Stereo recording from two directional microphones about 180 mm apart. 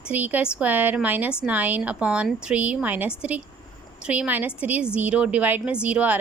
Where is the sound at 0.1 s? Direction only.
10° right (ahead or behind).